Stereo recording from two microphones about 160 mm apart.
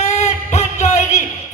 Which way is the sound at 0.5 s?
45° left (ahead or behind).